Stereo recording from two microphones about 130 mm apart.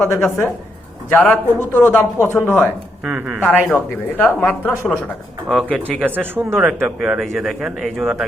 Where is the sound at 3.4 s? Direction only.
15° left (ahead or behind).